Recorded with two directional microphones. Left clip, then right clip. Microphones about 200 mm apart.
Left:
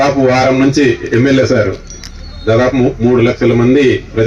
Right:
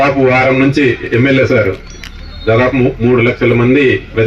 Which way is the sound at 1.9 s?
15° left (ahead or behind).